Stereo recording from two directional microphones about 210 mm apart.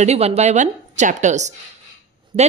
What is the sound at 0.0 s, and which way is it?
A woman's voice, 30° right (ahead or behind).